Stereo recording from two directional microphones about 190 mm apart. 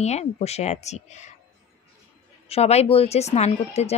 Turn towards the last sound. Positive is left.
turn(degrees=35)  # may be behind; listen again after turning